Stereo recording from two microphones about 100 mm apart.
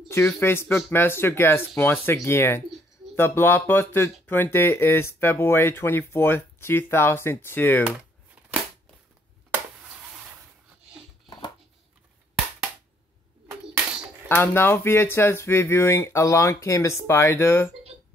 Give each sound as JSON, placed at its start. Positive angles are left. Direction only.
{"t": 0.4, "sound": "speech", "side_deg": 25}
{"t": 7.8, "sound": "typing", "side_deg": -10}
{"t": 14.3, "sound": "speech", "side_deg": 20}